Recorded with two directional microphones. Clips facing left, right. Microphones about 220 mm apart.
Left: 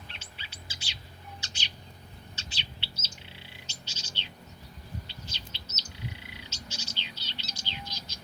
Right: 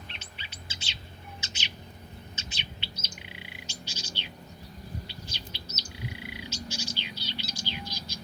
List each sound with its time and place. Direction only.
0.1 s bird: 20° right (ahead or behind)
2.3 s bird: 20° right (ahead or behind)